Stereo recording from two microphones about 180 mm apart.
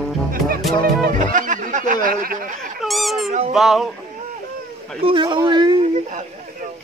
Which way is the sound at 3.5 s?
Centre (ahead or behind).